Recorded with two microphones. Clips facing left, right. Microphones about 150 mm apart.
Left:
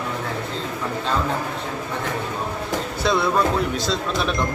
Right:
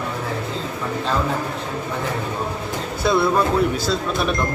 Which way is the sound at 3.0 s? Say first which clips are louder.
Right 2 dB; centre (ahead or behind).